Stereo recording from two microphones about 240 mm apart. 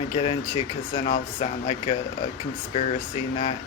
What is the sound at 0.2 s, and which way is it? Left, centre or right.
Speech, left.